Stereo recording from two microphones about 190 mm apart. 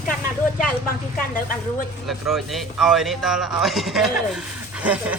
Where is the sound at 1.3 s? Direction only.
45° left (ahead or behind).